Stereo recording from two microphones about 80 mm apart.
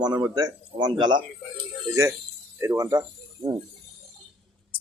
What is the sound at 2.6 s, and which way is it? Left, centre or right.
Speech, right.